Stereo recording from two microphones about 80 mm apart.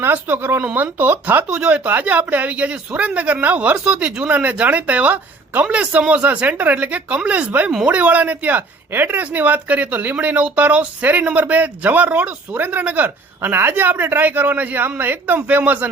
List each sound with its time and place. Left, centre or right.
0.0 s speech: right
1.5 s speech: centre